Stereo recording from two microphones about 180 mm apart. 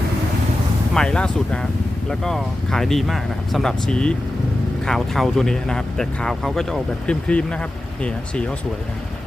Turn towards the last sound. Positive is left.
turn(degrees=5)  # may be behind; listen again after turning